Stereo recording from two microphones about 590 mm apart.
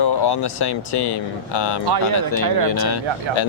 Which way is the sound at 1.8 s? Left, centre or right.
Right.